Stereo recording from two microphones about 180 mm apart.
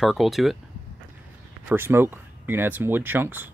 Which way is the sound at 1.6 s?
10° right (ahead or behind).